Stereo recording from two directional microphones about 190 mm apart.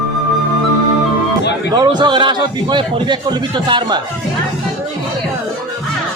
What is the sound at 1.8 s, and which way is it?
A man's voice, 25° right (ahead or behind).